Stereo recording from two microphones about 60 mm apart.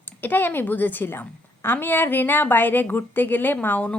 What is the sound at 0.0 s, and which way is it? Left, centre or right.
A woman's voice, left.